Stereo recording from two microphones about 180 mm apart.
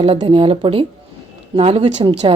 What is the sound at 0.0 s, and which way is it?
A woman's voice, 30° right (ahead or behind).